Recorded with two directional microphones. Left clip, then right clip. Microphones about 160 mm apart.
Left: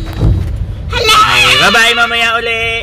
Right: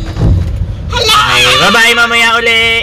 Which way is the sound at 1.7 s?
25° right (ahead or behind).